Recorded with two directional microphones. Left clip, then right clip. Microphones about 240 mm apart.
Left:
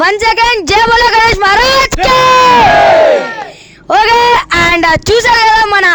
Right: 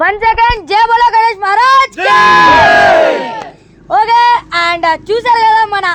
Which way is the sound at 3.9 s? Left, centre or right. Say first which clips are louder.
Left 1 dB; left.